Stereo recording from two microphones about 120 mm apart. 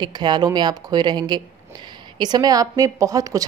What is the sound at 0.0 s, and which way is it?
A woman's voice, 40° right (ahead or behind).